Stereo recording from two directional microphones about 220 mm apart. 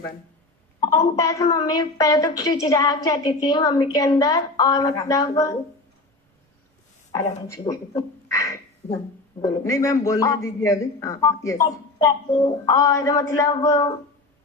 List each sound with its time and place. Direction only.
0.8 s a woman's voice: 15° left (ahead or behind)
7.1 s a woman's voice: 15° left (ahead or behind)